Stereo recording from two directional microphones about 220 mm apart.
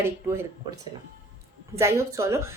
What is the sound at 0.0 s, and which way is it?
Speech, 10° right (ahead or behind).